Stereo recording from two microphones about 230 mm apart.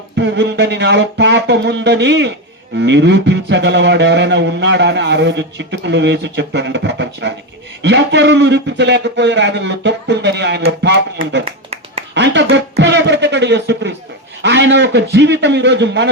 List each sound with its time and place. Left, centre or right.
0.2 s mantra: right